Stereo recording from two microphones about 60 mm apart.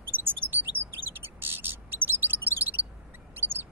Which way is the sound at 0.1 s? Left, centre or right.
Right.